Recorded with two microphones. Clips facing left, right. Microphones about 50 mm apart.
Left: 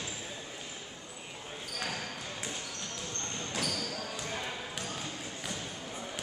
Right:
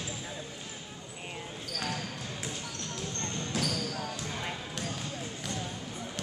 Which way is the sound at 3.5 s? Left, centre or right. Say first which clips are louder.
Right 3 dB; centre.